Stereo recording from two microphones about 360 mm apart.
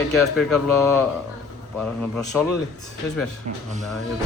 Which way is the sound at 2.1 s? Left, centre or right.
Centre.